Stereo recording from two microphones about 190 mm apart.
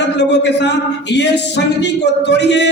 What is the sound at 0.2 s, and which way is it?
Speech, 65° left (ahead or behind).